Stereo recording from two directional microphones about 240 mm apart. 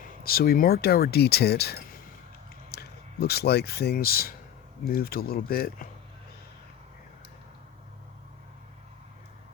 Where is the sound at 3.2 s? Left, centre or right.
Left.